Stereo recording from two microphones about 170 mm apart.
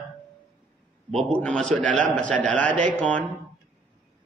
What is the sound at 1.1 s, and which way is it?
A man's voice, 5° left (ahead or behind).